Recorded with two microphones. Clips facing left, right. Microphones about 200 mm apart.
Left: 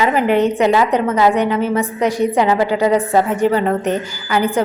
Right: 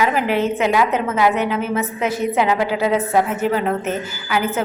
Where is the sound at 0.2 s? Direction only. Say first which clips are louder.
Left 4 dB; 5° right (ahead or behind).